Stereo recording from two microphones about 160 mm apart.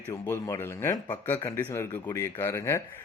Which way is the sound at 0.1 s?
15° left (ahead or behind).